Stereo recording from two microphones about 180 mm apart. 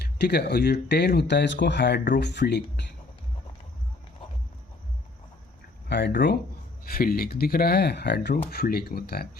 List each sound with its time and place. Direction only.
0.0 s speech: 65° left (ahead or behind)
5.9 s speech: 75° left (ahead or behind)
6.9 s speech: 55° left (ahead or behind)